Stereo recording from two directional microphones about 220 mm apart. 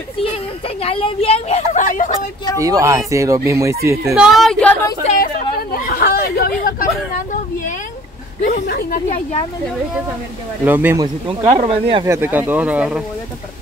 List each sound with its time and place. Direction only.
0.8 s a woman's voice: 25° left (ahead or behind)
2.6 s speech: 15° right (ahead or behind)
4.1 s a woman's voice: centre (ahead or behind)
5.0 s chatter: 40° left (ahead or behind)
8.5 s speech: 40° left (ahead or behind)
10.6 s speech: 10° right (ahead or behind)
11.2 s speech: 25° right (ahead or behind); by 13.0 s 5° right (ahead or behind)